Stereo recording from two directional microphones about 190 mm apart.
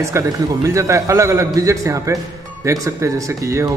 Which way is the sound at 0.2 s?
15° right (ahead or behind).